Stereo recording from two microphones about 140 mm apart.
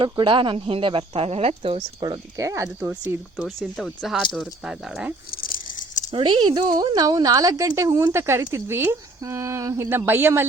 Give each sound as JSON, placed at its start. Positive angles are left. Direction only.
{"t": 0.0, "sound": "speech", "side_deg": -35}
{"t": 2.0, "sound": "speech", "side_deg": -25}
{"t": 3.8, "sound": "speech", "side_deg": 0}
{"t": 5.3, "sound": "a sound", "side_deg": 90}
{"t": 6.1, "sound": "speech", "side_deg": -35}